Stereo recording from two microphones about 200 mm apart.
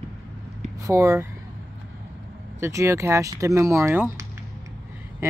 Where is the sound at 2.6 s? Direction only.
15° right (ahead or behind).